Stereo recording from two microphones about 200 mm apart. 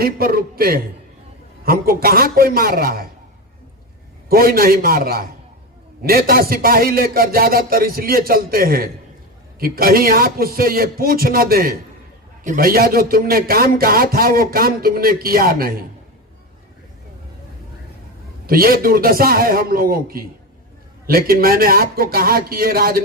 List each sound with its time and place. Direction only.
0.0 s a man's voice: 50° right (ahead or behind)
4.3 s speech: 50° right (ahead or behind)
18.4 s speech: 45° right (ahead or behind)